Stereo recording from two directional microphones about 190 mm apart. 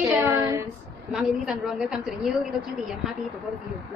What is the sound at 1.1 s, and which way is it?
A woman's voice, centre (ahead or behind).